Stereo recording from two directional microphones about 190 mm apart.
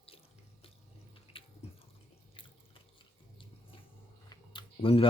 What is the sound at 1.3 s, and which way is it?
Drip, 30° left (ahead or behind).